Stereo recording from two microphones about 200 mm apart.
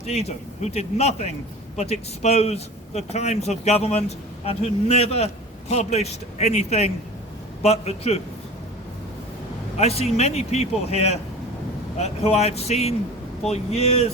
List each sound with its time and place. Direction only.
0.0 s a man's voice: 35° left (ahead or behind)
9.7 s a man's voice: 30° left (ahead or behind)